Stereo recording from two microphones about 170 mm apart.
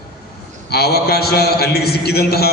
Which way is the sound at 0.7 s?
70° left (ahead or behind).